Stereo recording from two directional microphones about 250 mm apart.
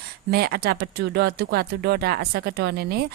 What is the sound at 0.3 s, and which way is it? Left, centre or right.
A woman's voice, right.